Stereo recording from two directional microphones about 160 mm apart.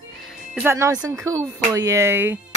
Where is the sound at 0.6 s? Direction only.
15° right (ahead or behind).